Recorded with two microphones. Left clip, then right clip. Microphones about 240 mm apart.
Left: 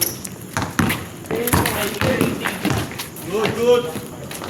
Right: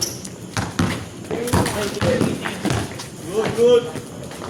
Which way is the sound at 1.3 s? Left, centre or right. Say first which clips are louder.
Left 2 dB; left.